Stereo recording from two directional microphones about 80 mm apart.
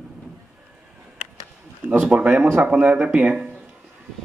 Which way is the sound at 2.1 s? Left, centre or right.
Centre.